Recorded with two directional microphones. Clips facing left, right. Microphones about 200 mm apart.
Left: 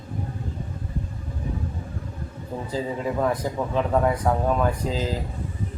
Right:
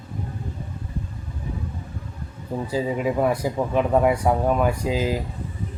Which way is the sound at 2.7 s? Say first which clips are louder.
Right 3 dB; 15° right (ahead or behind).